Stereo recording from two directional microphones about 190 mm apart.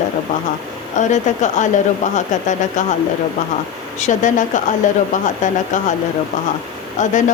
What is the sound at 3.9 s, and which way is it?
Speech, 40° left (ahead or behind).